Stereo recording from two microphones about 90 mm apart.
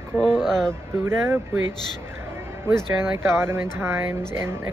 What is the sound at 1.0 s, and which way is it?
Speech, 25° right (ahead or behind).